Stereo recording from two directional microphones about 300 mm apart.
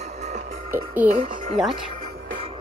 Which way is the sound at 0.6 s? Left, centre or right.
Centre.